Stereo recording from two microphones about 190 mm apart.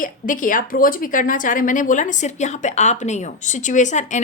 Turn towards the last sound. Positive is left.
turn(degrees=40)  # may be behind; listen again after turning